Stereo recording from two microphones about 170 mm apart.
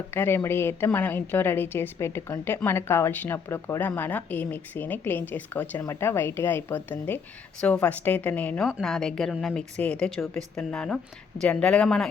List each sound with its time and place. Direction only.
0.1 s a woman's voice: 15° left (ahead or behind)